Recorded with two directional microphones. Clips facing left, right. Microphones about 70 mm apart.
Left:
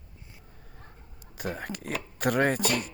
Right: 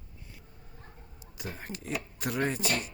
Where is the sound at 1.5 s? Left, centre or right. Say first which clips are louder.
Left 4 dB; left.